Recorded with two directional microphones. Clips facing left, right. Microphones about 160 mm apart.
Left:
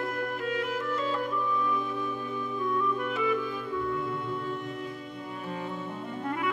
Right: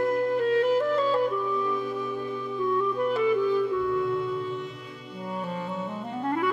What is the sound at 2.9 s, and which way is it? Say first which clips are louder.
Clarinet: right 5 dB; 35° right (ahead or behind).